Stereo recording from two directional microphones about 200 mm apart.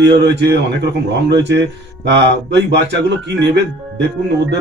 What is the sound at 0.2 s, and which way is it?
Speech, 55° right (ahead or behind).